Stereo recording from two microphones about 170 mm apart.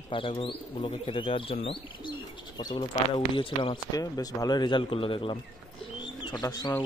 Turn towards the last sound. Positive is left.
turn(degrees=20)  # may be behind; listen again after turning